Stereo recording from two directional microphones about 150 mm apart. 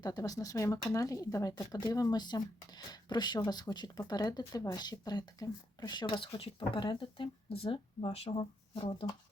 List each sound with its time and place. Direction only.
0.0 s speech: 25° left (ahead or behind)